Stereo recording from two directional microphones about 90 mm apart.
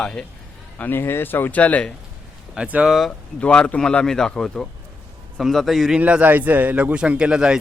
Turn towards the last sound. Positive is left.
turn(degrees=-10)  # may be behind; listen again after turning